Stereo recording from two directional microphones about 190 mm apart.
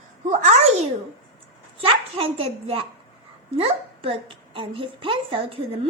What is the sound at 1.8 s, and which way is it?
A woman's voice, 30° right (ahead or behind).